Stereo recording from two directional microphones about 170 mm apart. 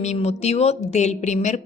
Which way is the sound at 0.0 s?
40° left (ahead or behind).